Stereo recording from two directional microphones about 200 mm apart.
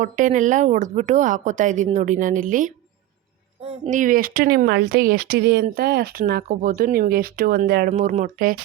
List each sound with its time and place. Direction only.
0.0 s a woman's voice: 40° right (ahead or behind)
7.9 s a woman's voice: 35° right (ahead or behind)